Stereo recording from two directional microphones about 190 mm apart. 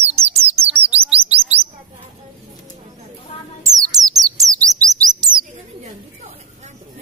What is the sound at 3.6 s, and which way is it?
Bird, 20° right (ahead or behind).